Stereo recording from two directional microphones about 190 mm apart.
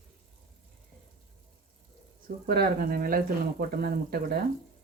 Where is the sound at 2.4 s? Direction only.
50° right (ahead or behind).